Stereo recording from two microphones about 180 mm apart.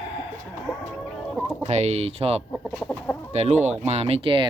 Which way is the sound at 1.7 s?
40° right (ahead or behind).